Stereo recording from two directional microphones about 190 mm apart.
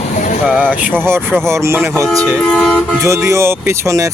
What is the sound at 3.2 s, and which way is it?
Speech, 15° right (ahead or behind).